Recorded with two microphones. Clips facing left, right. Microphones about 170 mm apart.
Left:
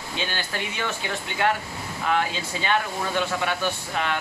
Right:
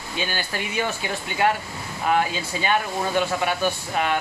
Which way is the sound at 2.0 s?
10° right (ahead or behind).